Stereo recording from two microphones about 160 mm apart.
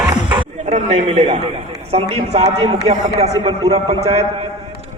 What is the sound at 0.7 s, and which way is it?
A man's voice, 50° right (ahead or behind).